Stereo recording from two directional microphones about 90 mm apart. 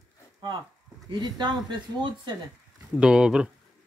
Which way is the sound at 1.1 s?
50° right (ahead or behind).